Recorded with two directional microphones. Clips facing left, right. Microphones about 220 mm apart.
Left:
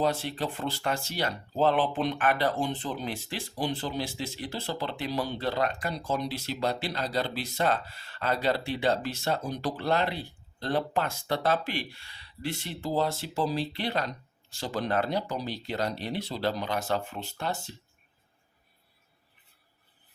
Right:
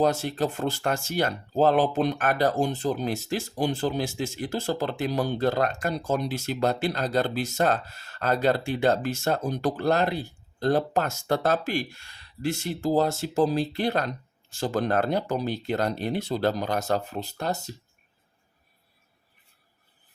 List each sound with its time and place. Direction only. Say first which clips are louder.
0.0 s speech: right 5 dB; 45° right (ahead or behind)